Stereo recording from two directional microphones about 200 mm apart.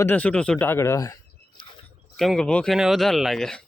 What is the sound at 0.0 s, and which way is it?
Speech, 10° left (ahead or behind).